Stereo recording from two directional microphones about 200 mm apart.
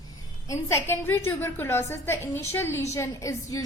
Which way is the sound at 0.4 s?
15° left (ahead or behind).